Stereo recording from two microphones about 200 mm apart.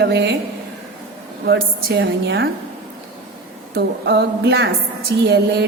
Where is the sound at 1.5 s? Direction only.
55° right (ahead or behind).